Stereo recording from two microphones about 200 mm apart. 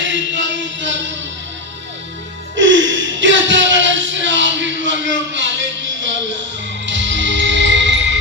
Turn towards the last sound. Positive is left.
turn(degrees=-65)  # may be behind; listen again after turning